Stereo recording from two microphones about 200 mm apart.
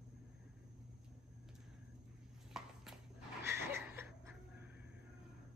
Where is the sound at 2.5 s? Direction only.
Centre (ahead or behind).